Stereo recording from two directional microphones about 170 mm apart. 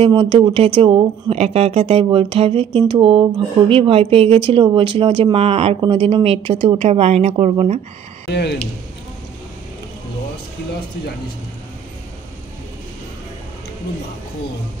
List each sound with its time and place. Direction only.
0.0 s speech: 30° right (ahead or behind)
8.3 s speech: 80° left